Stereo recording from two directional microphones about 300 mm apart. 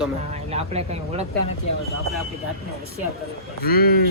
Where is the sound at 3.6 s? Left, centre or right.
Left.